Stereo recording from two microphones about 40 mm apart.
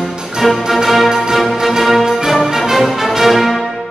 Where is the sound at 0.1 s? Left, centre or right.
Centre.